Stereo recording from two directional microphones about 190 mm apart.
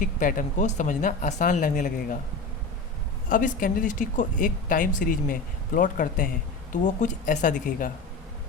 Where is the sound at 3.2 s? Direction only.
45° left (ahead or behind).